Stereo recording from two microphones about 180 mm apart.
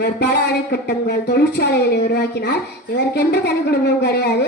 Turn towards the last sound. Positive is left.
turn(degrees=65)  # may be behind; listen again after turning